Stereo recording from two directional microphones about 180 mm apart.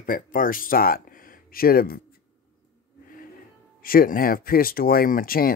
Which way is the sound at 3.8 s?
55° left (ahead or behind).